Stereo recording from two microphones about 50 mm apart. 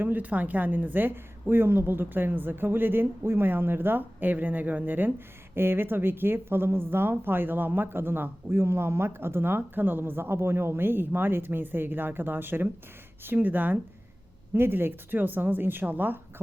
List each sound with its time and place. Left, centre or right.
0.0 s speech: right
5.5 s speech: right